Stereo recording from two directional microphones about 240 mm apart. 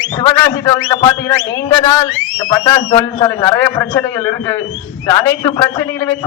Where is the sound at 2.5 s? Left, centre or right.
Centre.